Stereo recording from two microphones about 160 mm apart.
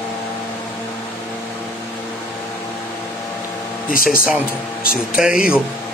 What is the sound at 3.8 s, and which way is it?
Speech, 60° left (ahead or behind).